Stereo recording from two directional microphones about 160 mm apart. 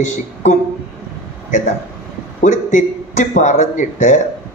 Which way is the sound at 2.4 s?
50° left (ahead or behind).